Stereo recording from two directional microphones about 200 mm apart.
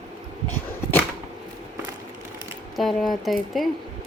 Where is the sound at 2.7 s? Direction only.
Centre (ahead or behind).